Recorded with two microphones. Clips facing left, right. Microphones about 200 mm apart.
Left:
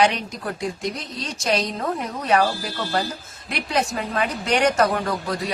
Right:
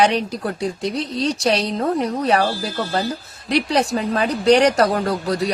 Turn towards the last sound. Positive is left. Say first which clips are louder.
# right 4 dB
turn(degrees=-40)  # may be behind; listen again after turning